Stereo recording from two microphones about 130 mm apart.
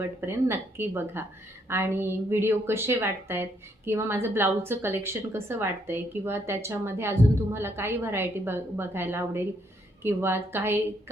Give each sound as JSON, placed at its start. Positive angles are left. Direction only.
{"t": 0.0, "sound": "a woman's voice", "side_deg": -20}